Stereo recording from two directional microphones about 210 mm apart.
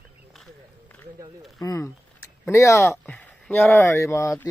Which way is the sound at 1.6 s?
15° left (ahead or behind).